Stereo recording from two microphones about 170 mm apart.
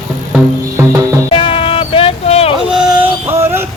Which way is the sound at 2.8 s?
10° right (ahead or behind).